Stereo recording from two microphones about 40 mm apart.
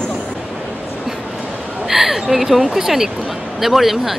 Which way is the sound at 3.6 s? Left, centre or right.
Centre.